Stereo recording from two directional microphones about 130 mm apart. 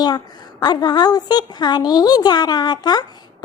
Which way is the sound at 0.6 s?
30° left (ahead or behind).